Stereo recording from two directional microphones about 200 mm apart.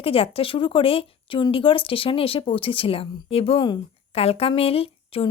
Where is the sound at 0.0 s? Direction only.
30° left (ahead or behind).